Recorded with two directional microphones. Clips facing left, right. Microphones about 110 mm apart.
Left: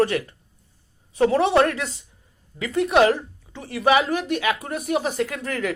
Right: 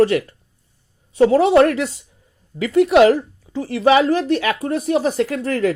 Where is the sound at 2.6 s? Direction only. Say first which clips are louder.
Right 6 dB; 30° left (ahead or behind).